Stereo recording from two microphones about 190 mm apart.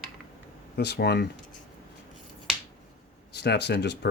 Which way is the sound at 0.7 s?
60° left (ahead or behind).